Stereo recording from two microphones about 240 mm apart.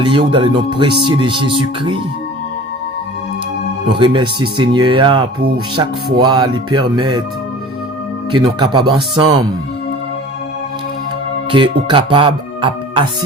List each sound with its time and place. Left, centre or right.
0.0 s speech: centre
3.8 s speech: right
8.4 s speech: centre
11.5 s speech: right